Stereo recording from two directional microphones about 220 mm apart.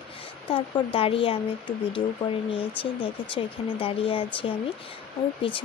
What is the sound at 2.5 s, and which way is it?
Speech, 25° left (ahead or behind).